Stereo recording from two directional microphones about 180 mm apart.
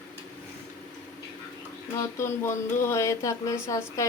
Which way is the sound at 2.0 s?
15° left (ahead or behind).